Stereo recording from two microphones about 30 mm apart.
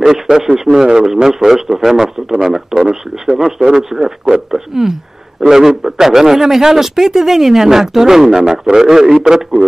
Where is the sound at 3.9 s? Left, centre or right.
Centre.